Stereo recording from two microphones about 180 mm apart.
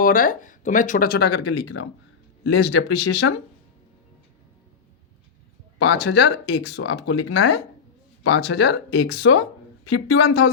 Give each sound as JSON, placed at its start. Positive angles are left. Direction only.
{"t": 0.0, "sound": "speech", "side_deg": 50}
{"t": 2.4, "sound": "speech", "side_deg": 70}
{"t": 5.8, "sound": "speech", "side_deg": 70}